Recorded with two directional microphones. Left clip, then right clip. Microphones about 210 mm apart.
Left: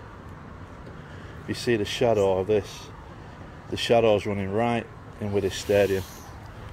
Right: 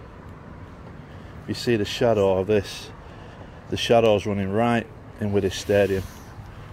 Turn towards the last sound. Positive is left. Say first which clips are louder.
# right 1 dB
turn(degrees=-10)  # may be behind; listen again after turning